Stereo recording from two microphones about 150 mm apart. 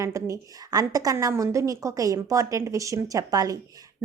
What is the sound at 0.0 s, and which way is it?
A woman's voice, 20° right (ahead or behind).